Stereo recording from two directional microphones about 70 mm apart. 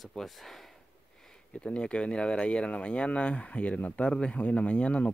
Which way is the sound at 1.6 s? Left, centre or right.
Centre.